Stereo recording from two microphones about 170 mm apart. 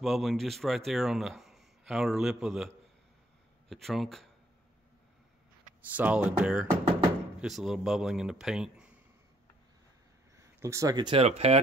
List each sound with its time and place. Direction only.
0.0 s a man's voice: centre (ahead or behind)
5.8 s a man's voice: 10° right (ahead or behind)
10.6 s speech: 15° right (ahead or behind); by 11.6 s 40° right (ahead or behind)